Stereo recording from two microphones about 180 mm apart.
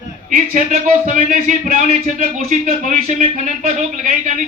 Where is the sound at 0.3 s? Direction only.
45° right (ahead or behind).